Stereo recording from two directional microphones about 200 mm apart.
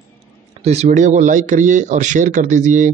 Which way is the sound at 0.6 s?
35° right (ahead or behind).